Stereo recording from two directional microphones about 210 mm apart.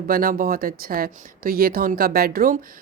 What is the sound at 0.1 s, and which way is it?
Speech, 45° right (ahead or behind).